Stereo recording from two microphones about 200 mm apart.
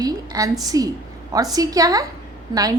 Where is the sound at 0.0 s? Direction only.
15° right (ahead or behind).